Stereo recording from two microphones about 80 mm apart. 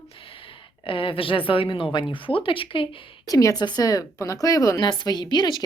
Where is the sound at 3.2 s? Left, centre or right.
Left.